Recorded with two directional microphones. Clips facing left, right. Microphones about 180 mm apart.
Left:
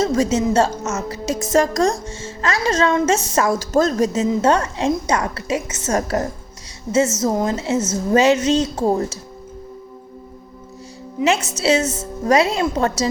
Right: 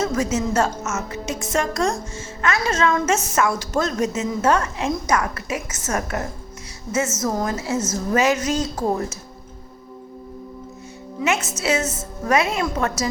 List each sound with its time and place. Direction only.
0.0 s a woman's voice: 30° left (ahead or behind)
11.2 s a woman's voice: 30° left (ahead or behind)